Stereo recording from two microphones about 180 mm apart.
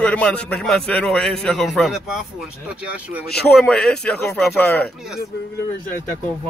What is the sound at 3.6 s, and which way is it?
A man's voice, 5° left (ahead or behind).